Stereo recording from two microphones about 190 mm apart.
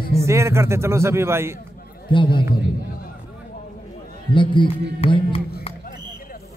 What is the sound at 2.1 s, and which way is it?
Music, 25° left (ahead or behind).